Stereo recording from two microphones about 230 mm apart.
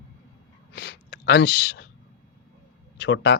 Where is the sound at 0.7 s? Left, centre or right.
Left.